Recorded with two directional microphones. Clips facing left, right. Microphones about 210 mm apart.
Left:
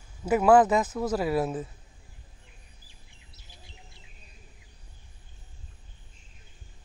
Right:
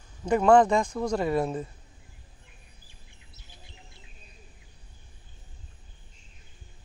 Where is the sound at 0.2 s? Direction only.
5° left (ahead or behind).